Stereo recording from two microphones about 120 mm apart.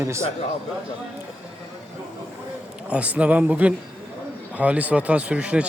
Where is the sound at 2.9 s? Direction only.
10° right (ahead or behind).